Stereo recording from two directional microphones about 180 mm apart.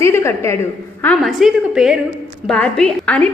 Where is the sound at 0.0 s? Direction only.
15° left (ahead or behind).